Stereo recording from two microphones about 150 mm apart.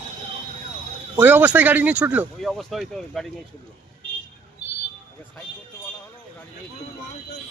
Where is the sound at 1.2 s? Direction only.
10° right (ahead or behind).